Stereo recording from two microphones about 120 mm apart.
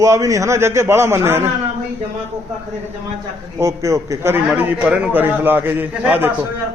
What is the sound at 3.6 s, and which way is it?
A man's voice, 25° right (ahead or behind).